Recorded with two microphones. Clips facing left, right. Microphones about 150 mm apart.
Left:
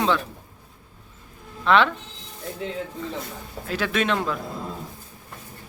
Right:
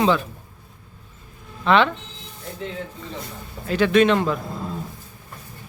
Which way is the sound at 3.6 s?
Centre (ahead or behind).